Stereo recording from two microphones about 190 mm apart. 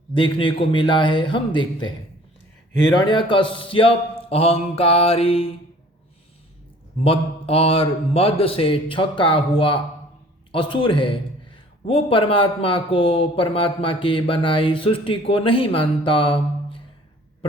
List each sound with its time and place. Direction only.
0.1 s a man's voice: 25° left (ahead or behind)
7.0 s a man's voice: 30° left (ahead or behind)